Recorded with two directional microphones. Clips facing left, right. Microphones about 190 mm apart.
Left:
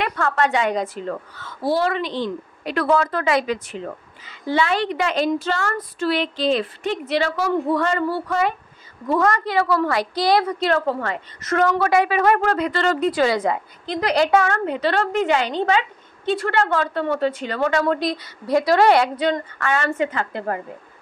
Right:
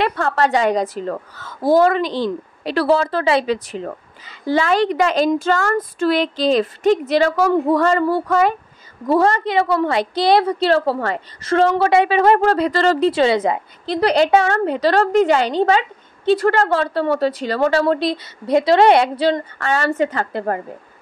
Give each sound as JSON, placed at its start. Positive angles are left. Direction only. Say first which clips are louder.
{"t": 0.0, "sound": "a woman's voice", "louder": "right 3 dB", "side_deg": -30}